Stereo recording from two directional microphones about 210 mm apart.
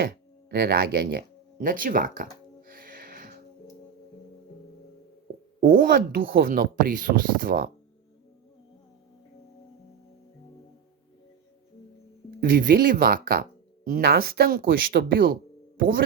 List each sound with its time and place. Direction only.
0.6 s a sound: 50° right (ahead or behind)
5.5 s speech: 40° right (ahead or behind)
12.4 s speech: 40° right (ahead or behind)